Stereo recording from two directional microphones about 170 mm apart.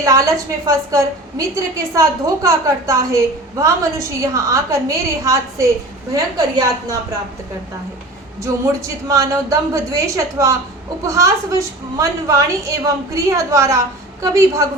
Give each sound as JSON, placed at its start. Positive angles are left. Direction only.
{"t": 0.0, "sound": "a woman's voice", "side_deg": -20}
{"t": 8.6, "sound": "a woman's voice", "side_deg": -20}